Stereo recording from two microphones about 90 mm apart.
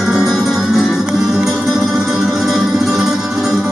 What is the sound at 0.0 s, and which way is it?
Music, 5° right (ahead or behind).